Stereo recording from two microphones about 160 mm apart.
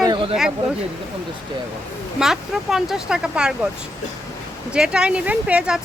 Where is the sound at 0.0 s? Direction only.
30° right (ahead or behind).